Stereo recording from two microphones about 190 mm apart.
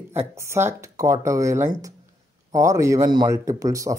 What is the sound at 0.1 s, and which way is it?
Speech, 15° right (ahead or behind).